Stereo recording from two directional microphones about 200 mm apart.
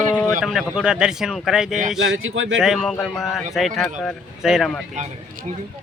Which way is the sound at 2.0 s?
75° right (ahead or behind).